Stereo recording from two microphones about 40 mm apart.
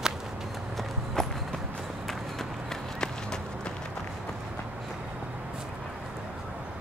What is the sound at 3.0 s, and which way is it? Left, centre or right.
Run, centre.